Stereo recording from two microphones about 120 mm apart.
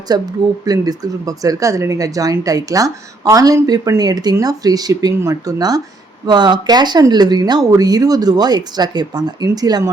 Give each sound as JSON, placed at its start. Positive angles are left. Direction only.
{"t": 0.1, "sound": "speech", "side_deg": -30}